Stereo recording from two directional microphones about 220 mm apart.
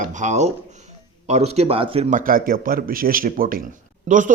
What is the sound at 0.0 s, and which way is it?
A man's voice, 35° right (ahead or behind).